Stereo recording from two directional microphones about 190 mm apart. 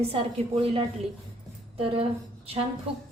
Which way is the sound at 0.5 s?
30° right (ahead or behind).